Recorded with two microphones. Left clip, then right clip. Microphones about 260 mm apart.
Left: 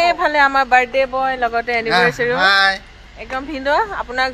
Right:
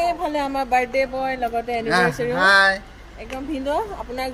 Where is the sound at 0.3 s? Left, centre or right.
Centre.